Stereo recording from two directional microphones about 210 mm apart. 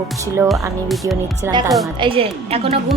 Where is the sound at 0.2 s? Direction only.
15° right (ahead or behind).